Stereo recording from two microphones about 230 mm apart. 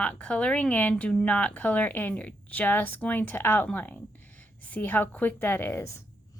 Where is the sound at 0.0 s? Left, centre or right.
Centre.